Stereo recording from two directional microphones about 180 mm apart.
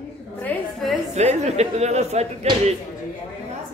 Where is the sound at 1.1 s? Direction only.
40° right (ahead or behind).